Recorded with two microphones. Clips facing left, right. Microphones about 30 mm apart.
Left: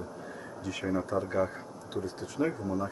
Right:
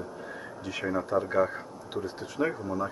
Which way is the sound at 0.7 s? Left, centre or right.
Centre.